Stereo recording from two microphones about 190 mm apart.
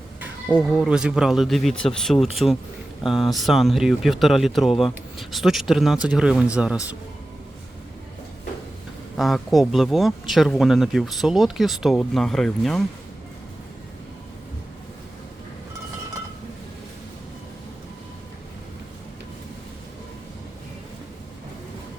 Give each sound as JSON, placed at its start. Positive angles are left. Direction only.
{"t": 0.4, "sound": "speech", "side_deg": -5}
{"t": 9.1, "sound": "speech", "side_deg": 0}